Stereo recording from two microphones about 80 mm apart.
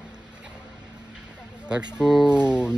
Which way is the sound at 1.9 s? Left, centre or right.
Centre.